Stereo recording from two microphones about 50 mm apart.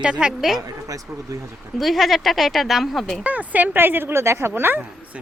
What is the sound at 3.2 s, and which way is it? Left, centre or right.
Speech, right.